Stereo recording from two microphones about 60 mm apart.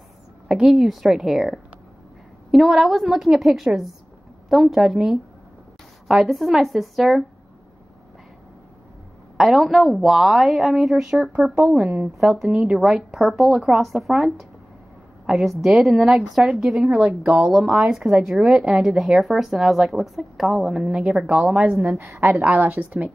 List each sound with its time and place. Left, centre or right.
0.5 s a woman's voice: centre
9.4 s a woman's voice: centre
17.2 s a woman's voice: centre
21.9 s a woman's voice: right
22.4 s a woman's voice: right